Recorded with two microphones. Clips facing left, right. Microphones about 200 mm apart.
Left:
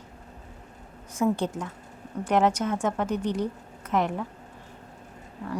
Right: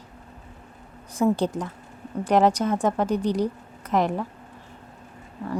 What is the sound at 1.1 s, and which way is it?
Speech, 35° right (ahead or behind).